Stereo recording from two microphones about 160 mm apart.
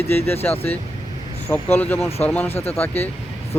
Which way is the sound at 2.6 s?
40° left (ahead or behind).